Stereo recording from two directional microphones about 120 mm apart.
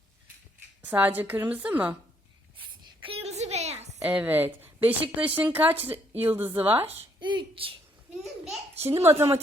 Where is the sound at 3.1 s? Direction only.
65° right (ahead or behind).